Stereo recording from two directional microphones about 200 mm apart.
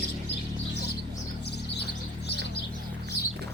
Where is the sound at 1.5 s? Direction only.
55° left (ahead or behind).